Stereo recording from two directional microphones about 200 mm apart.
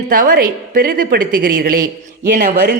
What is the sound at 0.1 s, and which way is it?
A woman's voice, 45° right (ahead or behind).